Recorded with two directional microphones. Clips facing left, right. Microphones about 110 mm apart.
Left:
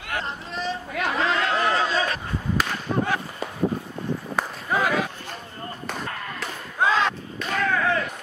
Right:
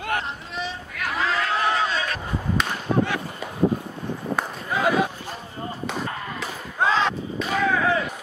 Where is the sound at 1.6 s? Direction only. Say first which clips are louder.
Even; centre (ahead or behind).